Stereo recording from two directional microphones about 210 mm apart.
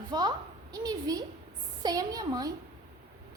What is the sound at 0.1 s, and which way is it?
A woman's voice, 20° right (ahead or behind).